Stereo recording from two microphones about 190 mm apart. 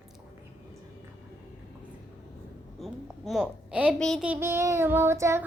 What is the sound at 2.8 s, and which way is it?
A woman's voice, centre (ahead or behind).